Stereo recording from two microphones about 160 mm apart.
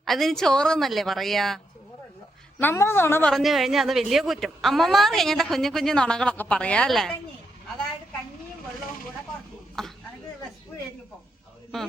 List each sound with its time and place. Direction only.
0.0 s speech: centre (ahead or behind)
2.6 s speech: 15° left (ahead or behind)
9.8 s a sound: centre (ahead or behind)